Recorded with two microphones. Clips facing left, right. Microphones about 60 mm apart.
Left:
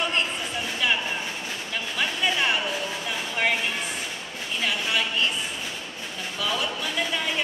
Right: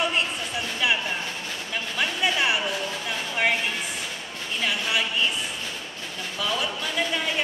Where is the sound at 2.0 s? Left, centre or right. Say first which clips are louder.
Right 1 dB; centre.